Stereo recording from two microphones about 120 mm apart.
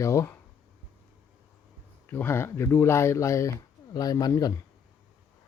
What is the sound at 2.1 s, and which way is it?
Speech, 20° left (ahead or behind).